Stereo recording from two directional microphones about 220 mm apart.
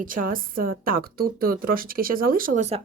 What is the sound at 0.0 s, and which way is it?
Speech, 40° right (ahead or behind).